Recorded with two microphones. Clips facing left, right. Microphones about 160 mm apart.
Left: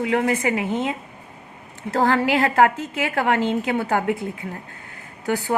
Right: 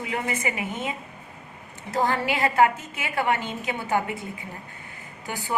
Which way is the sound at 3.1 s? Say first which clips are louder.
Left 5 dB; 90° left.